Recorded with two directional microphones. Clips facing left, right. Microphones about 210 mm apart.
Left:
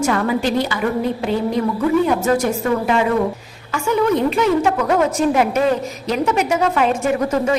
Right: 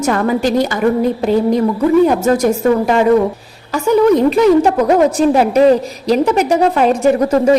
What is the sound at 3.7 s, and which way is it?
A woman's voice, 35° right (ahead or behind).